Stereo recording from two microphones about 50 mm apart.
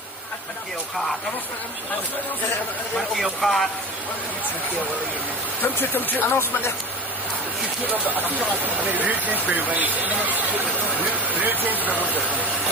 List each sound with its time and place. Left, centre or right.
3.2 s speech: centre
5.9 s speech: left
8.0 s speech: left
8.9 s speech: right